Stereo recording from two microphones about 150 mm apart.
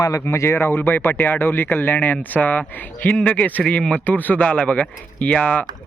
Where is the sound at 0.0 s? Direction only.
20° left (ahead or behind).